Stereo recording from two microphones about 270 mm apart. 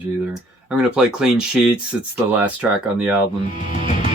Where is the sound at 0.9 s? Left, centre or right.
Centre.